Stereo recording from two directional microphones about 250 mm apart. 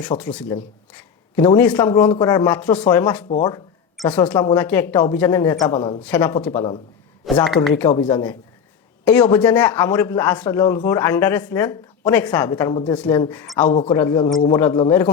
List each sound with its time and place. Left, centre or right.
0.2 s a woman's voice: centre
4.5 s a woman's voice: centre
6.0 s a woman's voice: centre
6.5 s speech: left
7.4 s speech: centre
7.8 s a woman's voice: centre